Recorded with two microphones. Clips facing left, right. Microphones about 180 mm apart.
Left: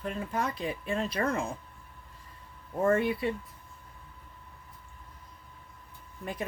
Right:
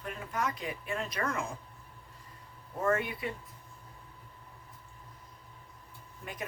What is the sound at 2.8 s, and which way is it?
Speech, 30° left (ahead or behind).